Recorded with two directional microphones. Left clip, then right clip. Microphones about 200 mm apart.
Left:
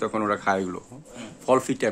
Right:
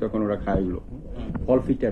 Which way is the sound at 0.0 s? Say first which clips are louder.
Left 1 dB; 20° left (ahead or behind).